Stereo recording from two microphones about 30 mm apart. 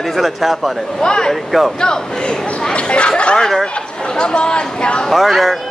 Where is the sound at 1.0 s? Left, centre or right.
Left.